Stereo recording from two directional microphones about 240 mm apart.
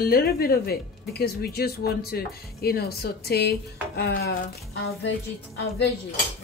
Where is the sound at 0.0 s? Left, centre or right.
Left.